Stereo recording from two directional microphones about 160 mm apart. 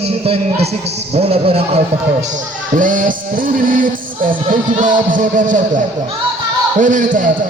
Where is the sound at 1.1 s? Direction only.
35° right (ahead or behind).